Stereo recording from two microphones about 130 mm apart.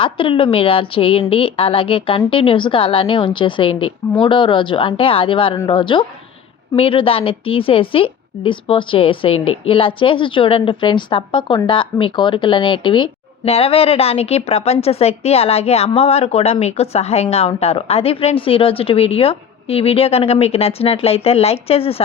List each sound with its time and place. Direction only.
0.0 s a woman's voice: 40° left (ahead or behind)